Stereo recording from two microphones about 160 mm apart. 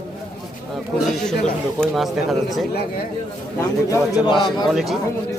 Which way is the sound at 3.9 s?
25° left (ahead or behind).